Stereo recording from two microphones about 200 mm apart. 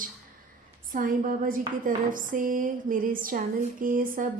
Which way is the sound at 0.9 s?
45° right (ahead or behind).